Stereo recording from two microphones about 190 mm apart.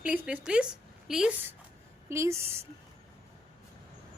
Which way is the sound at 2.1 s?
15° right (ahead or behind).